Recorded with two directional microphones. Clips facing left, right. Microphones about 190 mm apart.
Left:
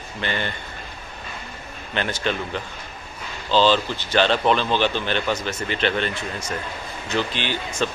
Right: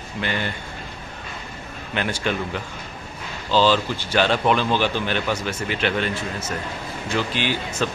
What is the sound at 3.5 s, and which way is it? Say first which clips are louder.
Speech: even; 10° right (ahead or behind).